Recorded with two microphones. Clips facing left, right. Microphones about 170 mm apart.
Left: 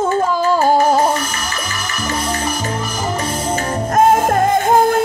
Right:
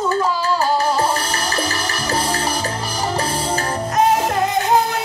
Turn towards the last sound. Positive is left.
turn(degrees=50)  # may be behind; listen again after turning